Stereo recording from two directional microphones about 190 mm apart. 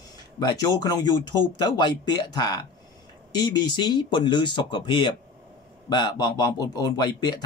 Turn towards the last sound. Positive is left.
turn(degrees=20)  # may be behind; listen again after turning